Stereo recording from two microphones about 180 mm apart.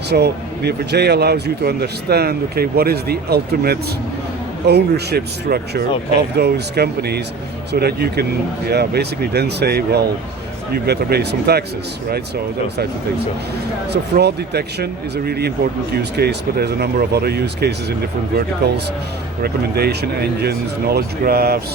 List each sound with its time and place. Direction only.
0.1 s a man's voice: 65° right (ahead or behind)
13.9 s a man's voice: 65° right (ahead or behind)